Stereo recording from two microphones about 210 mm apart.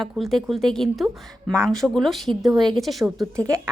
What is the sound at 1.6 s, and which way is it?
Speech, centre (ahead or behind).